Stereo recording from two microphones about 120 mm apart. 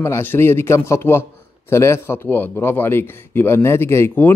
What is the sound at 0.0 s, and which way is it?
Speech, 20° left (ahead or behind).